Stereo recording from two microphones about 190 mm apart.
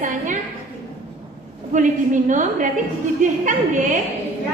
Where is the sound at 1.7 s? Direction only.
40° right (ahead or behind).